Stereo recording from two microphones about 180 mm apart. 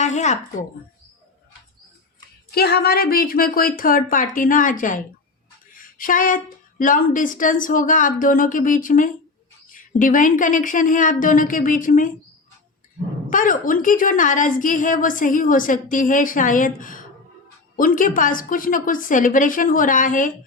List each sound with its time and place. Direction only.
0.0 s speech: 40° left (ahead or behind)
2.6 s a woman's voice: 60° left (ahead or behind)
13.3 s a woman's voice: 50° left (ahead or behind)